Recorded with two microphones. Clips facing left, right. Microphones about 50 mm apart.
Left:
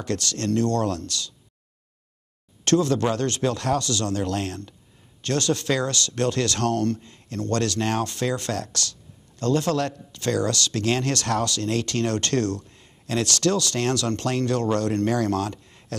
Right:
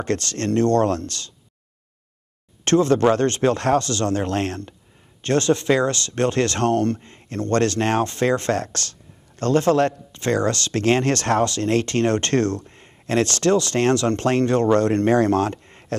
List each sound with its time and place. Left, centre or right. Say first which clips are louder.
0.0 s speech: right 3 dB; right
2.6 s speech: right 4 dB; right